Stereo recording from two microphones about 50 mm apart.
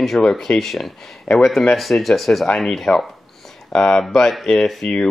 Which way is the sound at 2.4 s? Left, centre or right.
Centre.